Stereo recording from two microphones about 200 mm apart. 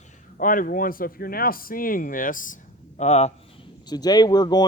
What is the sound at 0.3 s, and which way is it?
Speech, 45° left (ahead or behind).